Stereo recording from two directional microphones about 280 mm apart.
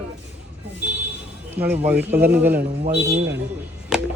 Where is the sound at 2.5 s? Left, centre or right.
Right.